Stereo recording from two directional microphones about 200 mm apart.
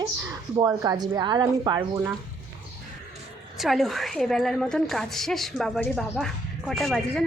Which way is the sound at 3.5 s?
Centre (ahead or behind).